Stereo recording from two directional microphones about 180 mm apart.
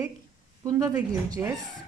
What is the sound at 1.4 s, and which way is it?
Speech, 10° right (ahead or behind).